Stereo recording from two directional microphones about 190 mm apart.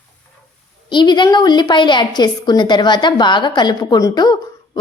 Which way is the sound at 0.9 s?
25° left (ahead or behind).